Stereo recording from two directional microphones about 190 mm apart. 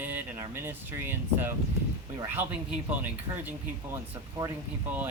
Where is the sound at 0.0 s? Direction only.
10° right (ahead or behind).